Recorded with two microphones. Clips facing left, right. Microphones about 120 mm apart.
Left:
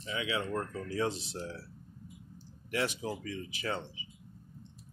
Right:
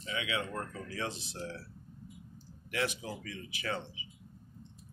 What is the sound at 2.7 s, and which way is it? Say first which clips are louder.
Speech: left 2 dB; 35° left (ahead or behind).